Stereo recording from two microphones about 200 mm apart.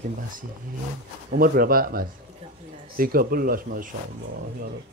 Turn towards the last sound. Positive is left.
turn(degrees=-45)  # may be behind; listen again after turning